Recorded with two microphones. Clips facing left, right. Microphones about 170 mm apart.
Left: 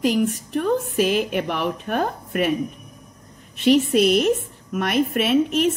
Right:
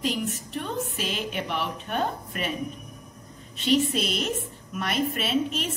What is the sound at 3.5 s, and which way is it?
A woman's voice, 60° left (ahead or behind).